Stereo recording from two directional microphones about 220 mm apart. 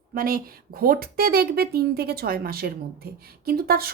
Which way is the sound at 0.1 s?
40° right (ahead or behind).